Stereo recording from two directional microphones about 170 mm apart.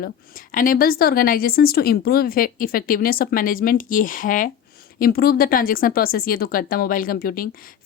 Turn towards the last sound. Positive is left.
turn(degrees=60)  # may be behind; listen again after turning